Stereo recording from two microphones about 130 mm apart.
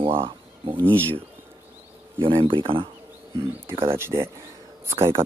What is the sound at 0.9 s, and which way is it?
Speech, 10° left (ahead or behind).